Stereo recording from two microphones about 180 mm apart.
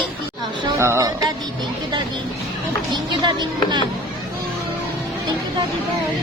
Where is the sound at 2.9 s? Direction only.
25° right (ahead or behind).